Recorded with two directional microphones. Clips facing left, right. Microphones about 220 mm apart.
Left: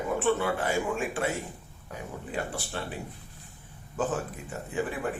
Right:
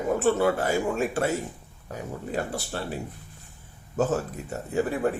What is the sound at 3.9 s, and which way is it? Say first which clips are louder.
Speech: right 5 dB; 40° right (ahead or behind).